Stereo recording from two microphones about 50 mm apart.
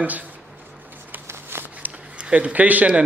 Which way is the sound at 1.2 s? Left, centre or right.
Right.